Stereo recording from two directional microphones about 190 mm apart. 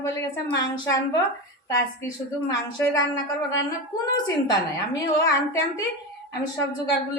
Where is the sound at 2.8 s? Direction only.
10° left (ahead or behind).